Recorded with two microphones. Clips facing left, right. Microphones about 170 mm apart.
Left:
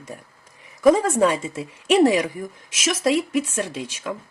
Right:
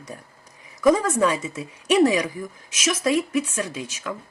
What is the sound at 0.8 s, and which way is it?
Speech, 25° left (ahead or behind).